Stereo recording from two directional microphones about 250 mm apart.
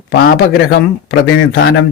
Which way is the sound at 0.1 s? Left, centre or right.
Left.